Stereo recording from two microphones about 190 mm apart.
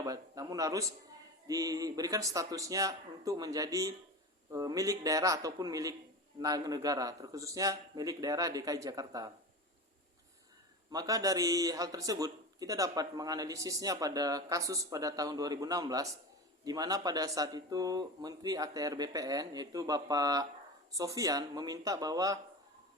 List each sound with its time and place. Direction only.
0.0 s a man's voice: 20° right (ahead or behind)
10.9 s a man's voice: 20° right (ahead or behind)